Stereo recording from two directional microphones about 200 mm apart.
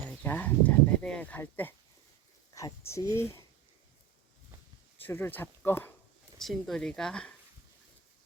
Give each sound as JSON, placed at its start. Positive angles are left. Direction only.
{"t": 0.2, "sound": "speech", "side_deg": 10}
{"t": 4.9, "sound": "speech", "side_deg": 10}